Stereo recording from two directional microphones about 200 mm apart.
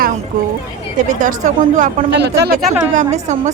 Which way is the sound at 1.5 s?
40° right (ahead or behind).